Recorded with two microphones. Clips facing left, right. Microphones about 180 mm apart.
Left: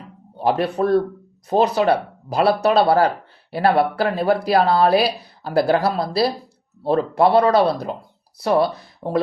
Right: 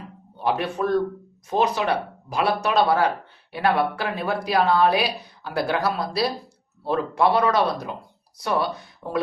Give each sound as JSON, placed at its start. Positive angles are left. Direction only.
{"t": 0.3, "sound": "speech", "side_deg": 35}